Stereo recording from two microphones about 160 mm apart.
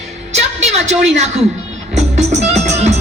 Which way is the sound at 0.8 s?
45° right (ahead or behind).